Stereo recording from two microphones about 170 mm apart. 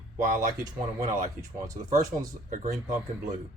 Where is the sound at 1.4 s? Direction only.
20° right (ahead or behind).